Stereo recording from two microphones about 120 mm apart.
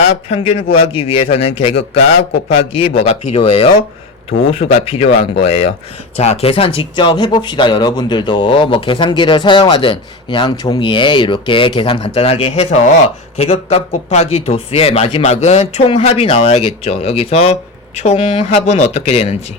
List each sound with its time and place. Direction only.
0.3 s speech: 50° left (ahead or behind)
1.1 s speech: 90° left
1.5 s a man's voice: 55° left (ahead or behind)